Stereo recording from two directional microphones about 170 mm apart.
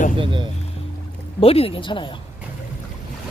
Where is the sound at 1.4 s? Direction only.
35° left (ahead or behind).